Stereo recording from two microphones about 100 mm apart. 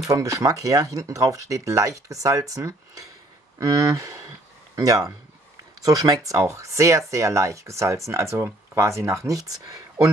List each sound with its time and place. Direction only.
0.1 s speech: 35° right (ahead or behind)